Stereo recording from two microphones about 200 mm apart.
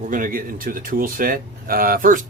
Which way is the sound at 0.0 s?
40° right (ahead or behind).